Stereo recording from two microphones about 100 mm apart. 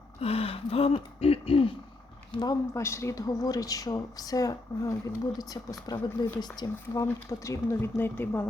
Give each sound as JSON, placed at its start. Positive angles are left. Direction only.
{"t": 0.2, "sound": "gasp", "side_deg": 75}
{"t": 2.4, "sound": "speech", "side_deg": 35}
{"t": 7.0, "sound": "speech", "side_deg": 30}